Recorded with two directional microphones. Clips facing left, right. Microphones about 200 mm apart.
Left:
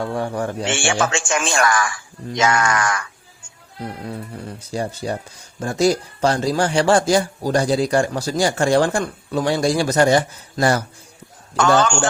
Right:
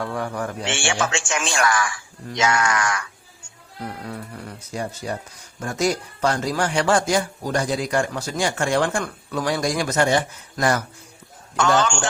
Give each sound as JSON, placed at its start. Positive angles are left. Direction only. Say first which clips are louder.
{"t": 0.0, "sound": "speech", "louder": "left 4 dB", "side_deg": 30}
{"t": 0.6, "sound": "speech", "louder": "left 3 dB", "side_deg": 50}
{"t": 4.0, "sound": "speech", "louder": "left 3 dB", "side_deg": 25}